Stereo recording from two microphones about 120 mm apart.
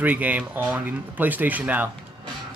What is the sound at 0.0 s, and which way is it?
A man's voice, 15° right (ahead or behind).